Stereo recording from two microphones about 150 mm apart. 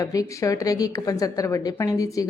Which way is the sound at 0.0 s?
20° left (ahead or behind).